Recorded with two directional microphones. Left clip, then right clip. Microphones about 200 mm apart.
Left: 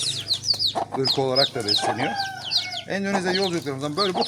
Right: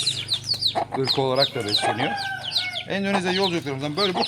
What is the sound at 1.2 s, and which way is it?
Speech, centre (ahead or behind).